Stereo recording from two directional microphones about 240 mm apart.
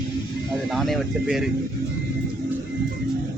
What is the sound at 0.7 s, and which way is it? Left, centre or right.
Speech, centre.